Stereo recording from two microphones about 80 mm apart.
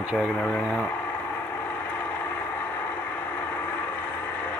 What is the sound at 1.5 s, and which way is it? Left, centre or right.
Vehicle, left.